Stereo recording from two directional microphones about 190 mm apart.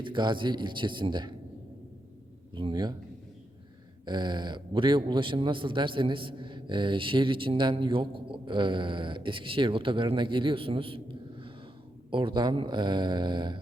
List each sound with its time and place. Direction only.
0.0 s a man's voice: 25° right (ahead or behind)
2.6 s a man's voice: 25° right (ahead or behind)
4.0 s a man's voice: 25° right (ahead or behind)